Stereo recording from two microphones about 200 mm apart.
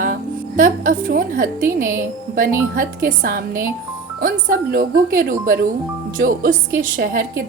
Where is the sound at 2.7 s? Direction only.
45° right (ahead or behind).